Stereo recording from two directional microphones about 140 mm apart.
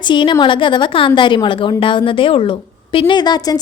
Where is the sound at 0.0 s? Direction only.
35° left (ahead or behind).